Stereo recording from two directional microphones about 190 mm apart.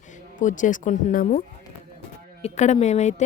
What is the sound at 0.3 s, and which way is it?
Speech, 40° left (ahead or behind).